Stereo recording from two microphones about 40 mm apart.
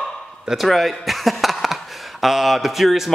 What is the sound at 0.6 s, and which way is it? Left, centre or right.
A man's voice, centre.